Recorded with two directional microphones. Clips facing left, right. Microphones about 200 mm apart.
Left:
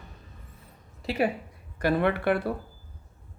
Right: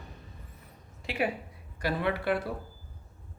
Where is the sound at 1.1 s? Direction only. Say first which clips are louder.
Left 5 dB; 40° left (ahead or behind).